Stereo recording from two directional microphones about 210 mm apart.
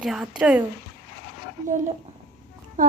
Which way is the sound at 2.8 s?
40° right (ahead or behind).